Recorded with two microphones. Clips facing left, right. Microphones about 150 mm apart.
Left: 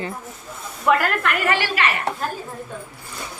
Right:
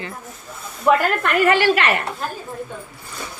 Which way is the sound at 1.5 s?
50° right (ahead or behind).